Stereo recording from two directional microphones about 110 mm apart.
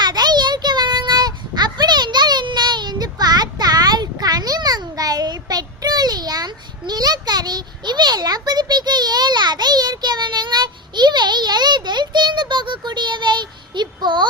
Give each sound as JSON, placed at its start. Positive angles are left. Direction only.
{"t": 0.0, "sound": "child singing", "side_deg": -40}